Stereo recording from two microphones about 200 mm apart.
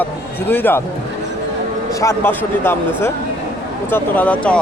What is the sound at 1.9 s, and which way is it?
Speech, 15° left (ahead or behind).